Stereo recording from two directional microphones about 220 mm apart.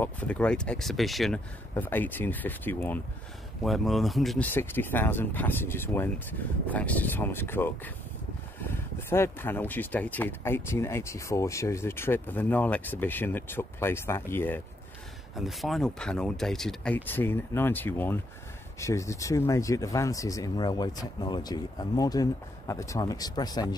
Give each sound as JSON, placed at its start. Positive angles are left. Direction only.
{"t": 0.0, "sound": "speech", "side_deg": 5}
{"t": 8.9, "sound": "speech", "side_deg": 10}
{"t": 15.3, "sound": "speech", "side_deg": 0}